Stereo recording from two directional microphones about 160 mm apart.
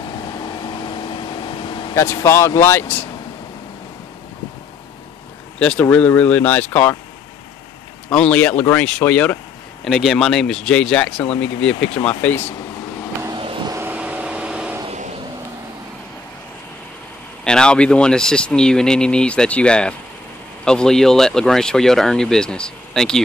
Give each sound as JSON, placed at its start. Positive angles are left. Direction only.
{"t": 0.4, "sound": "vehicle", "side_deg": 30}
{"t": 2.0, "sound": "speech", "side_deg": 15}
{"t": 5.6, "sound": "speech", "side_deg": 10}
{"t": 8.1, "sound": "speech", "side_deg": 5}
{"t": 13.4, "sound": "vehicle", "side_deg": -35}
{"t": 13.7, "sound": "vehicle", "side_deg": -15}
{"t": 17.5, "sound": "speech", "side_deg": 5}